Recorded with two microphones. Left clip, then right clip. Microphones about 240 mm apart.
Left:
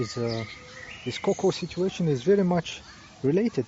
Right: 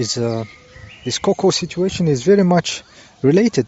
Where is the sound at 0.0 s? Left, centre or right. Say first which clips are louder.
Right 9 dB; right.